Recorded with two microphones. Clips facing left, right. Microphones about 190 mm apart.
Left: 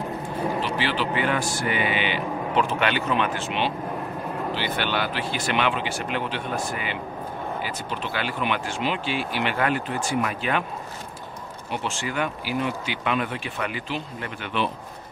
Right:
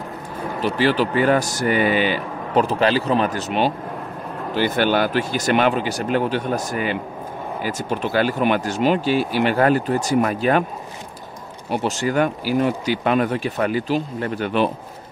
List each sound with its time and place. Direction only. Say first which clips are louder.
0.6 s a man's voice: right 7 dB; 45° right (ahead or behind)
11.7 s a man's voice: right 8 dB; 40° right (ahead or behind)